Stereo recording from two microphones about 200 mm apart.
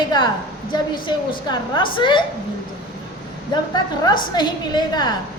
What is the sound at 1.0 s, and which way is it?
A woman's voice, 25° left (ahead or behind).